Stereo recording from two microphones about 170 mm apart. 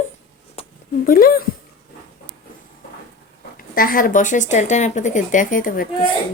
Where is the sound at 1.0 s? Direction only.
55° left (ahead or behind).